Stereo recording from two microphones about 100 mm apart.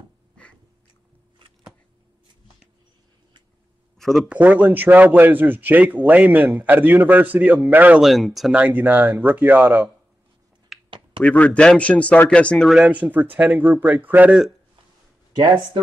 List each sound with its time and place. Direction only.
4.0 s speech: centre (ahead or behind)
4.3 s speech: 15° right (ahead or behind)
8.0 s speech: centre (ahead or behind)
8.5 s speech: 15° right (ahead or behind)
10.7 s a sound: centre (ahead or behind)
11.2 s speech: 15° left (ahead or behind)
12.6 s speech: 5° right (ahead or behind)
12.9 s speech: 15° right (ahead or behind)
15.3 s speech: 45° right (ahead or behind)